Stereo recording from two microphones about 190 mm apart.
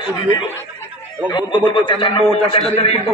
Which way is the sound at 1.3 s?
25° left (ahead or behind).